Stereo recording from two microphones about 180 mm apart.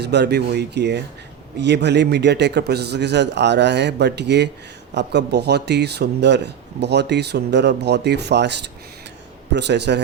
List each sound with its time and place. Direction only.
0.0 s speech: 70° right (ahead or behind)